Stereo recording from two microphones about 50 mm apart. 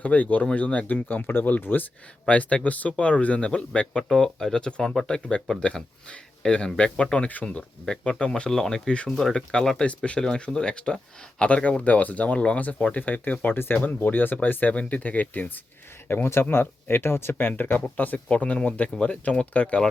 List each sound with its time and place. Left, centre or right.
0.0 s speech: left
1.0 s speech: left
2.2 s speech: left
13.5 s speech: left
16.0 s speech: left